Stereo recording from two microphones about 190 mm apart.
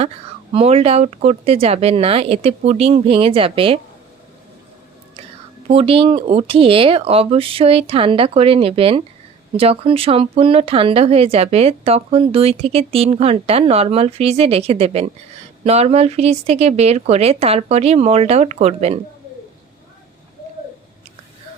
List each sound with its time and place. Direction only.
0.5 s speech: 30° right (ahead or behind)
5.6 s speech: 30° right (ahead or behind)